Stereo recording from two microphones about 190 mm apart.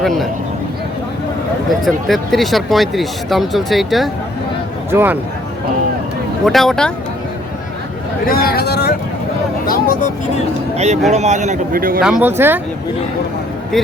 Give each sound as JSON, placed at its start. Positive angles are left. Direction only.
{"t": 0.0, "sound": "speech", "side_deg": 0}
{"t": 1.8, "sound": "speech", "side_deg": 0}
{"t": 4.9, "sound": "speech", "side_deg": -10}
{"t": 6.4, "sound": "speech", "side_deg": 0}
{"t": 8.3, "sound": "speech", "side_deg": 55}
{"t": 11.1, "sound": "a man's voice", "side_deg": -35}
{"t": 12.0, "sound": "speech", "side_deg": -5}